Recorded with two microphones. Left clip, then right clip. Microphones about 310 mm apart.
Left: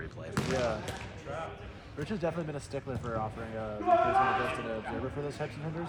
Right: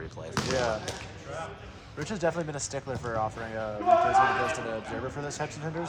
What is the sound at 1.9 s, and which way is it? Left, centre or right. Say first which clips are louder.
Speech: right 5 dB; right.